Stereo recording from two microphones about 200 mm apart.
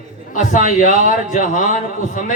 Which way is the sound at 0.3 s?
40° left (ahead or behind).